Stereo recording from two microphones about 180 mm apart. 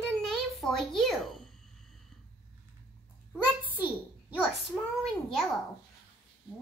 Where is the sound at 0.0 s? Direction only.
Centre (ahead or behind).